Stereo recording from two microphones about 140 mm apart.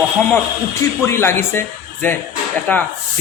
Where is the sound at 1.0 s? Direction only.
20° left (ahead or behind).